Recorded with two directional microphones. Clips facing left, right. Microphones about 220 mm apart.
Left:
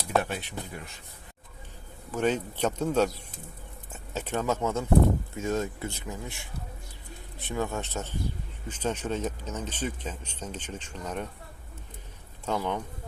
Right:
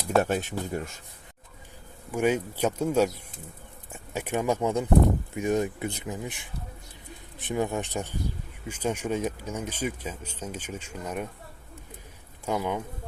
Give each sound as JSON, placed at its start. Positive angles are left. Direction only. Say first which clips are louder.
{"t": 0.2, "sound": "speech", "louder": "right 7 dB", "side_deg": -45}
{"t": 2.1, "sound": "speech", "louder": "right 2 dB", "side_deg": -10}
{"t": 12.5, "sound": "speech", "louder": "right 1 dB", "side_deg": -10}